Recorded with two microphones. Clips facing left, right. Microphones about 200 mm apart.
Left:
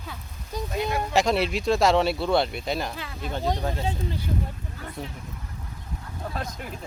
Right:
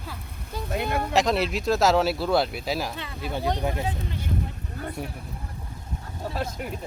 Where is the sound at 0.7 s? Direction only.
55° right (ahead or behind).